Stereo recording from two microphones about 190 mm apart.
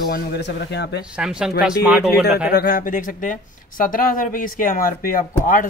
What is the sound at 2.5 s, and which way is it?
Speech, 55° left (ahead or behind).